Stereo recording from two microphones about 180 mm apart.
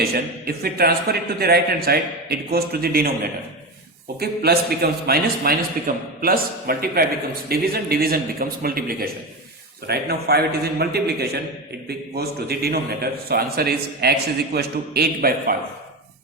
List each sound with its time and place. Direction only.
0.0 s a man's voice: 60° right (ahead or behind)
4.2 s a man's voice: 60° right (ahead or behind)